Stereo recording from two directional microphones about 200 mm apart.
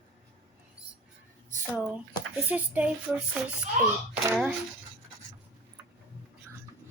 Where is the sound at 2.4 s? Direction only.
5° right (ahead or behind).